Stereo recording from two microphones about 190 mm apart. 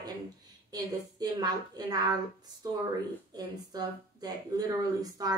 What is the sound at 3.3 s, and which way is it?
A woman's voice, 20° right (ahead or behind).